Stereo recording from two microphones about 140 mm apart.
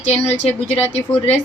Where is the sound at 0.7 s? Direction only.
15° left (ahead or behind).